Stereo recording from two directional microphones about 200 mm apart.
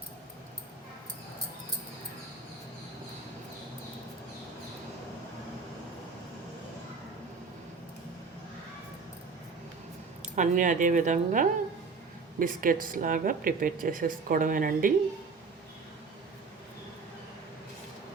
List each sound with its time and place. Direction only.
10.3 s speech: 40° right (ahead or behind)